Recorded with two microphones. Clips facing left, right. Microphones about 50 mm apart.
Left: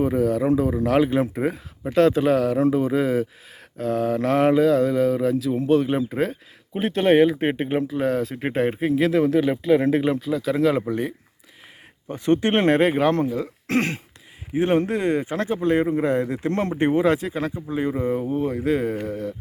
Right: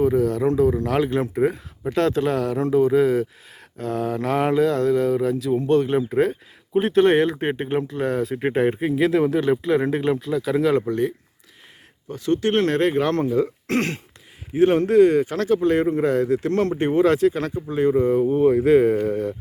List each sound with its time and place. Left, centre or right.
0.0 s speech: centre
12.0 s speech: left; by 16.0 s centre
16.0 s speech: centre
18.2 s speech: centre